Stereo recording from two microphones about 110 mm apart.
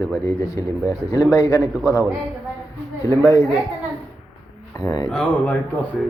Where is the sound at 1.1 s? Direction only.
35° left (ahead or behind).